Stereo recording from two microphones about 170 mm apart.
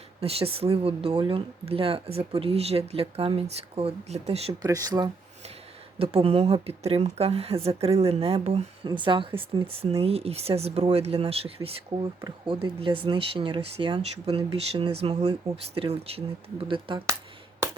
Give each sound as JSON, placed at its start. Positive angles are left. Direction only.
{"t": 0.2, "sound": "speech", "side_deg": -35}
{"t": 4.6, "sound": "speech", "side_deg": -20}
{"t": 6.2, "sound": "speech", "side_deg": -35}